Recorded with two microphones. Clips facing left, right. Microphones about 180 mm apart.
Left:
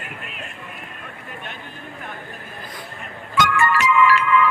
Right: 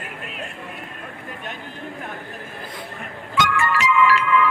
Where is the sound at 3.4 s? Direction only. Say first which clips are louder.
Left 2 dB; 50° left (ahead or behind).